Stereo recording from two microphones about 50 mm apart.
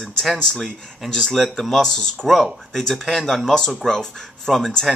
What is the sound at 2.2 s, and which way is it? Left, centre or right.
Speech, centre.